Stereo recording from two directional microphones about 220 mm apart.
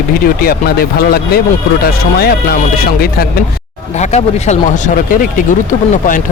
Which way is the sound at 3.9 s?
30° left (ahead or behind).